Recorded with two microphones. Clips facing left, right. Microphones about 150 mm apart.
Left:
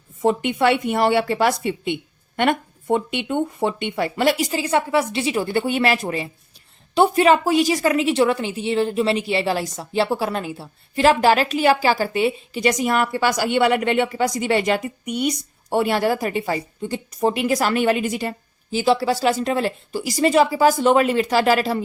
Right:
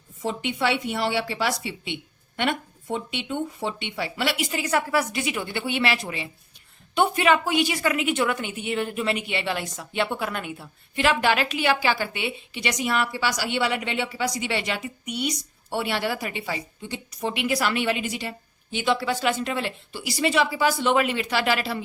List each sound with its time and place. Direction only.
0.2 s a woman's voice: 55° left (ahead or behind)